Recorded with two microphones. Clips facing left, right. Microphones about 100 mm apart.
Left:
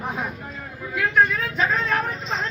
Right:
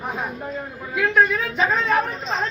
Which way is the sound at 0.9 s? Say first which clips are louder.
Right 2 dB; 5° right (ahead or behind).